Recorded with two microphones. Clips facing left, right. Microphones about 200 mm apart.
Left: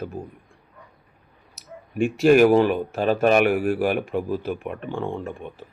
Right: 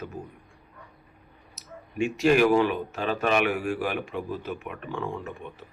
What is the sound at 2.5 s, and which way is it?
Speech, 40° left (ahead or behind).